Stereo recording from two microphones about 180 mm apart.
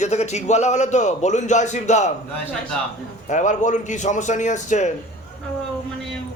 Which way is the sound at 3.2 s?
40° left (ahead or behind).